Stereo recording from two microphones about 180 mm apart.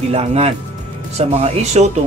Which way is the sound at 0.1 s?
35° right (ahead or behind).